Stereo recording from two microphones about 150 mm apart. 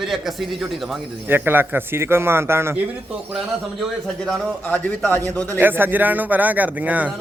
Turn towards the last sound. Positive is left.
turn(degrees=-10)  # may be behind; listen again after turning